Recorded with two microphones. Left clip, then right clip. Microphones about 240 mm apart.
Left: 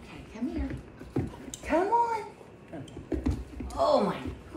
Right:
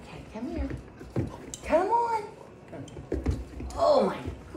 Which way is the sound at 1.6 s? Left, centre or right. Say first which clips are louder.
Right 1 dB; centre.